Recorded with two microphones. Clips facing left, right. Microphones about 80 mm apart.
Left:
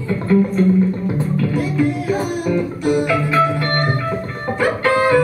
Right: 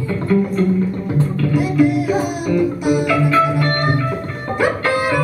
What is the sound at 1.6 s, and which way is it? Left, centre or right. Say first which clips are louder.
Music: right 7 dB; centre.